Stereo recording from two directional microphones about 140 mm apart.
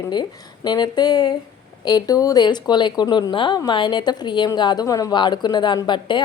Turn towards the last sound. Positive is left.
turn(degrees=35)  # may be behind; listen again after turning